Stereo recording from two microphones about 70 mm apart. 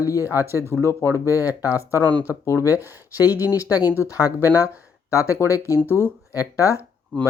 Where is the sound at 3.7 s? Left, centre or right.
Right.